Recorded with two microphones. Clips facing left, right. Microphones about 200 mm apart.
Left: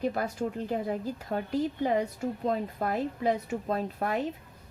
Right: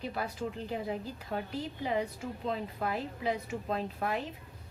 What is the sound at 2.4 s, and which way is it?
Speech, 45° left (ahead or behind).